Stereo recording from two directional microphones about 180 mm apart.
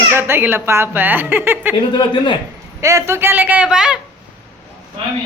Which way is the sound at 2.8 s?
15° right (ahead or behind).